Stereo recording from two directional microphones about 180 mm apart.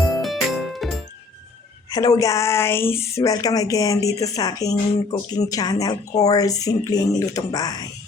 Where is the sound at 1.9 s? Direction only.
20° left (ahead or behind).